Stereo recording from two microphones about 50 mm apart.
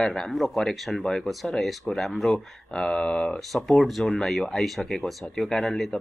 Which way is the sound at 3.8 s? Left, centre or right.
Centre.